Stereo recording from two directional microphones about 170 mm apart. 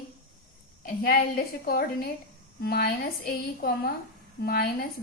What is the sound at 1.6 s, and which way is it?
A woman's voice, 60° left (ahead or behind).